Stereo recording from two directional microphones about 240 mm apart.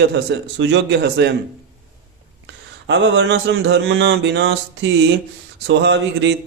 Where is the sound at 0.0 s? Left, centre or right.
Right.